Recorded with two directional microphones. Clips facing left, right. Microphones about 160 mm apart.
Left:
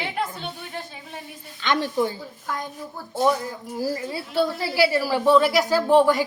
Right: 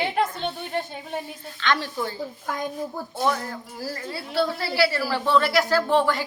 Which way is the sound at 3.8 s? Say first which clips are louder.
Left 6 dB; 15° left (ahead or behind).